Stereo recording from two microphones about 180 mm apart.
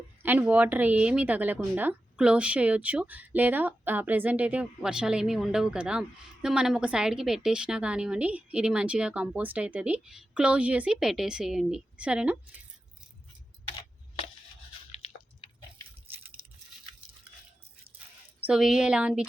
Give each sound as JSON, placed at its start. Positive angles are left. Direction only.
{"t": 0.2, "sound": "a woman's voice", "side_deg": -10}
{"t": 14.9, "sound": "chewing", "side_deg": 35}
{"t": 18.3, "sound": "speech", "side_deg": -5}